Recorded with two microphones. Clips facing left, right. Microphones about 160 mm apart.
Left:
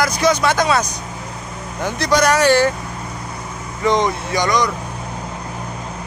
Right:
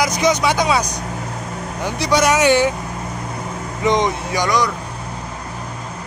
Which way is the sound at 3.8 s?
15° right (ahead or behind).